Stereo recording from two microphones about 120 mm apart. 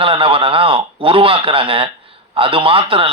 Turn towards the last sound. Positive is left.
turn(degrees=-50)  # may be behind; listen again after turning